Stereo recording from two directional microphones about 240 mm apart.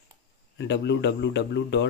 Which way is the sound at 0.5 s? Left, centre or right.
Left.